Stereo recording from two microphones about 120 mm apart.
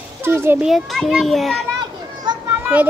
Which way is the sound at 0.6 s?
Centre (ahead or behind).